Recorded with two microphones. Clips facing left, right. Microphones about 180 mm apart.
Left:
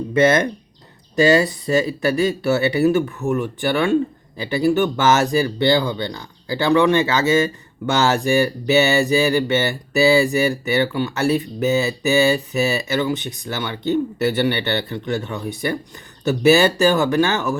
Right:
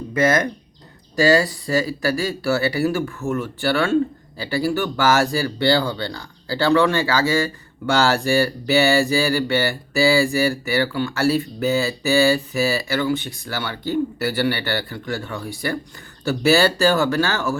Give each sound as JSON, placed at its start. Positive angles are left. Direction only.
{"t": 0.1, "sound": "speech", "side_deg": 25}